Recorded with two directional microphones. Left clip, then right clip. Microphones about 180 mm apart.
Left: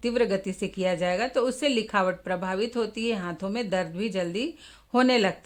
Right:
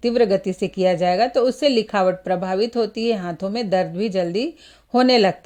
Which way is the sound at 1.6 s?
35° right (ahead or behind).